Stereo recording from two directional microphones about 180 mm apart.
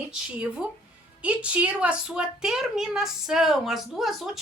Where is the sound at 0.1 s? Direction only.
5° right (ahead or behind).